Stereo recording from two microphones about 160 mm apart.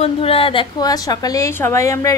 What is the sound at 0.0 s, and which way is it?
A woman's voice, 35° left (ahead or behind).